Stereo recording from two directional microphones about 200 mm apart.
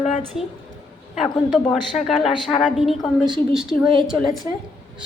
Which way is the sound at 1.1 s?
Centre (ahead or behind).